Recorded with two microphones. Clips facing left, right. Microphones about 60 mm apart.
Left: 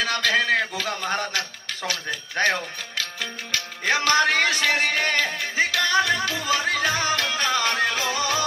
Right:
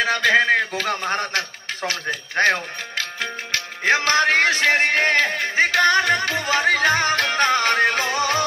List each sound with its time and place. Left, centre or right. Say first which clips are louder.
0.0 s music: right 5 dB; right
0.7 s speech: right 3 dB; right
3.8 s speech: right 2 dB; right
5.4 s music: right 6 dB; right